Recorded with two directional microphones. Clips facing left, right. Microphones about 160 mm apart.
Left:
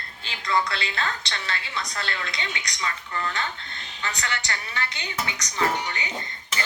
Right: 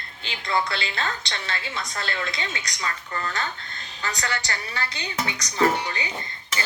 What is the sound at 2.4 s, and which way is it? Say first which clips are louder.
Speech: right 1 dB; 40° right (ahead or behind).